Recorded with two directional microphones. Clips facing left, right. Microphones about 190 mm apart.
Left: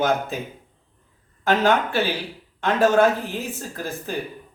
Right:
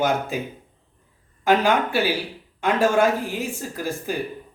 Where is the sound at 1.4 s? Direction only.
10° right (ahead or behind).